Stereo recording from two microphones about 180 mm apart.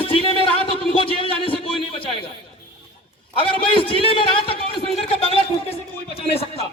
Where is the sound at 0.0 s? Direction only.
30° left (ahead or behind).